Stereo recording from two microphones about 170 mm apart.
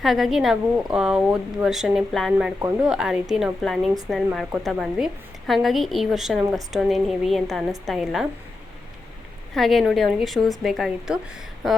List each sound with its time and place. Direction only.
0.0 s a woman's voice: centre (ahead or behind)
9.6 s a woman's voice: centre (ahead or behind)